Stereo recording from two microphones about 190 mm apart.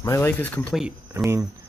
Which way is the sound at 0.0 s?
15° left (ahead or behind).